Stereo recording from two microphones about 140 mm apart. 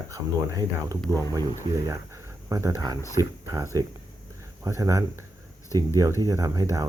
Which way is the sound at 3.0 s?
20° left (ahead or behind).